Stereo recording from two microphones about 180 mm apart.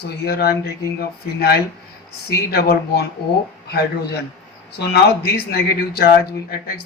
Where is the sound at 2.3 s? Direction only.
60° left (ahead or behind).